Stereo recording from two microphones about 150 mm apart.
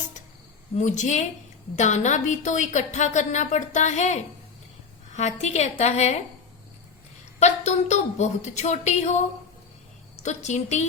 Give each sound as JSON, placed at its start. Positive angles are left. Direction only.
{"t": 0.8, "sound": "a woman's voice", "side_deg": 55}
{"t": 7.3, "sound": "a woman's voice", "side_deg": 50}
{"t": 10.2, "sound": "a woman's voice", "side_deg": 50}